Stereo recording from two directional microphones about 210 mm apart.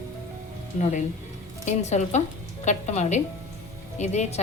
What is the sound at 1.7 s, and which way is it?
A woman's voice, 35° left (ahead or behind).